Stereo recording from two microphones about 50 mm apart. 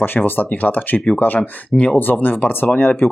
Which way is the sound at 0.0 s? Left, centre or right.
Left.